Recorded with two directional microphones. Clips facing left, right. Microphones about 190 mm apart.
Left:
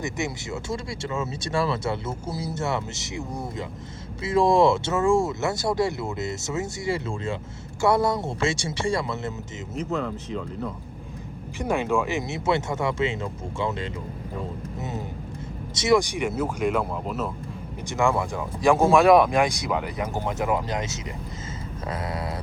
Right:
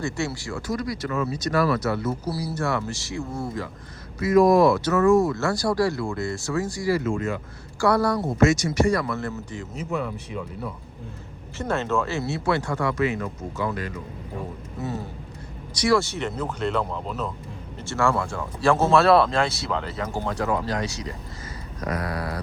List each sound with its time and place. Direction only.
0.0 s speech: 20° left (ahead or behind)
11.5 s speech: 15° left (ahead or behind)
14.8 s a sound: 20° left (ahead or behind)
15.7 s speech: 20° left (ahead or behind); by 17.3 s 5° left (ahead or behind)
17.8 s speech: 15° left (ahead or behind)